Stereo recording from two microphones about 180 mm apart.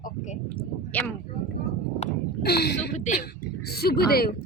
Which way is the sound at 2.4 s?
60° left (ahead or behind).